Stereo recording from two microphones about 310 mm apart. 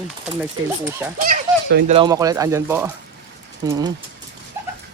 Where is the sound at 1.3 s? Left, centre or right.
Right.